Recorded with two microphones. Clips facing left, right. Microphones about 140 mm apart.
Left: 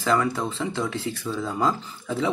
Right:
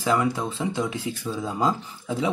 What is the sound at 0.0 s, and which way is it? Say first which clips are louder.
Speech: even; 10° right (ahead or behind).